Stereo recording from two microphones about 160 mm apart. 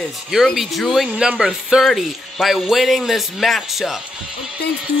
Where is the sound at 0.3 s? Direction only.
Centre (ahead or behind).